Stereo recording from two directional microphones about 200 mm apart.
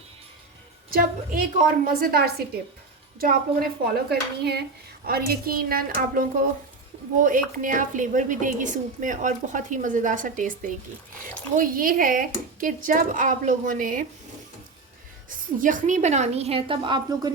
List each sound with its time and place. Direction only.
0.9 s speech: 45° right (ahead or behind)
15.3 s speech: 40° right (ahead or behind); by 17.3 s 20° right (ahead or behind)